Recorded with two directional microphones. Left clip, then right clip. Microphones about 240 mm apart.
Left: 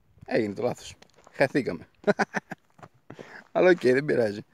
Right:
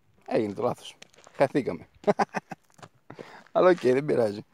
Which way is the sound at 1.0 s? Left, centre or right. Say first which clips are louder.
Right 3 dB; right.